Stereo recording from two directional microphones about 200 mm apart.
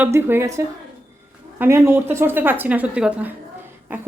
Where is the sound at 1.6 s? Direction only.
15° right (ahead or behind).